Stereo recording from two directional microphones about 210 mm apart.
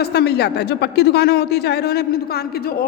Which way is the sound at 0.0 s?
50° left (ahead or behind).